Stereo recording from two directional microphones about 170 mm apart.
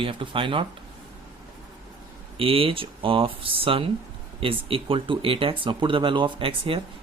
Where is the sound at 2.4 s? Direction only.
35° right (ahead or behind).